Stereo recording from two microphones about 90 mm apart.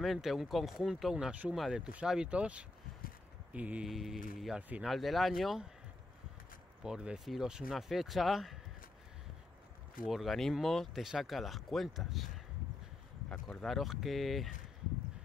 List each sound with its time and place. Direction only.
0.0 s speech: centre (ahead or behind)
3.8 s speech: centre (ahead or behind)
4.6 s speech: 15° right (ahead or behind)
4.8 s speech: centre (ahead or behind)
6.8 s speech: 10° right (ahead or behind)
10.0 s speech: centre (ahead or behind)
13.3 s speech: 5° left (ahead or behind)